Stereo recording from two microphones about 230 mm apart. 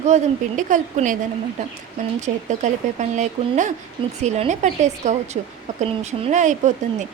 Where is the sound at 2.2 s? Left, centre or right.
Right.